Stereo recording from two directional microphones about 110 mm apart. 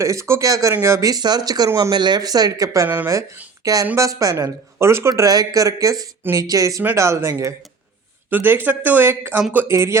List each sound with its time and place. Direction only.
0.0 s speech: 25° right (ahead or behind)
2.8 s speech: 20° right (ahead or behind)
3.2 s speech: 30° right (ahead or behind)